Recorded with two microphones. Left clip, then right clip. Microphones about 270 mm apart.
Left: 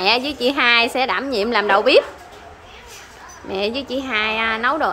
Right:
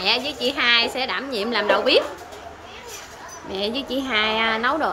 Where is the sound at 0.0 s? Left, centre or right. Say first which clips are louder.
Left 4 dB; centre.